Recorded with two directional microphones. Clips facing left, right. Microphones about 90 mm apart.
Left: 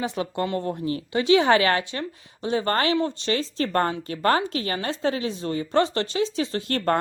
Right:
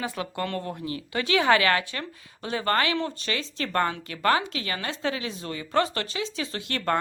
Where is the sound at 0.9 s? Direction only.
30° left (ahead or behind).